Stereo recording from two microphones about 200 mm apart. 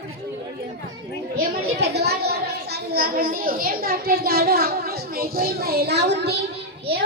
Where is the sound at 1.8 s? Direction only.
55° right (ahead or behind).